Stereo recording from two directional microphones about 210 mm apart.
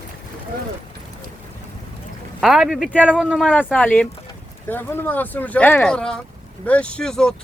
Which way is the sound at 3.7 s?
5° left (ahead or behind).